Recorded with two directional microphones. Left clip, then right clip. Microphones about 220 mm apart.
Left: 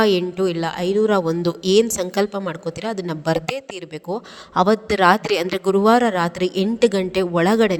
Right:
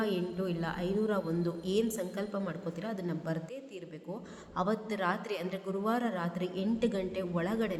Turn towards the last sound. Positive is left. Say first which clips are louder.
# left 17 dB
turn(degrees=45)  # may be behind; listen again after turning